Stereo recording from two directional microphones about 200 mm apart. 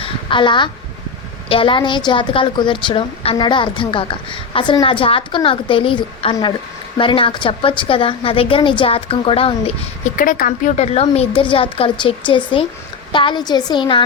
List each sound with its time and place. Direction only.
0.0 s a sound: 25° left (ahead or behind)
1.5 s a woman's voice: 25° left (ahead or behind)
10.2 s a woman's voice: 45° left (ahead or behind); by 14.0 s 25° left (ahead or behind)